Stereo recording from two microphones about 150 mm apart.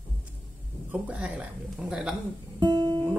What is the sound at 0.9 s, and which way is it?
Speech, 10° right (ahead or behind).